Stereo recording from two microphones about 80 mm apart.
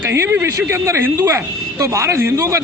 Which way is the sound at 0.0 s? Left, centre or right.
Right.